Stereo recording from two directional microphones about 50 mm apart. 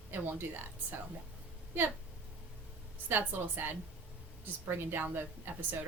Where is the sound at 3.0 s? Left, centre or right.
Right.